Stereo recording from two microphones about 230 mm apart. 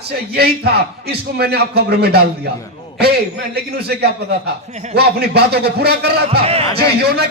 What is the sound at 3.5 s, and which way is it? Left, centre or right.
A man's voice, right.